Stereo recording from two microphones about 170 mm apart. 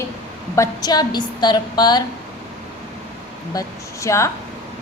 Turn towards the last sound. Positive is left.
turn(degrees=15)  # may be behind; listen again after turning